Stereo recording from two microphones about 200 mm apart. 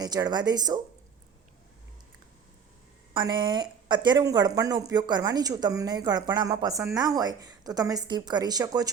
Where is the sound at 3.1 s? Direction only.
20° right (ahead or behind).